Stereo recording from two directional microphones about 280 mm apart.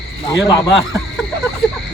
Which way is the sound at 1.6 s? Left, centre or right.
Centre.